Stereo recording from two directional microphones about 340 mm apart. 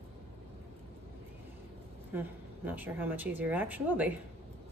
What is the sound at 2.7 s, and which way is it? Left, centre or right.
Speech, centre.